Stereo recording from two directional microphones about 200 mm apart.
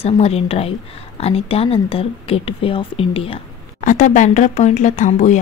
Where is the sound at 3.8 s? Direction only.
40° left (ahead or behind).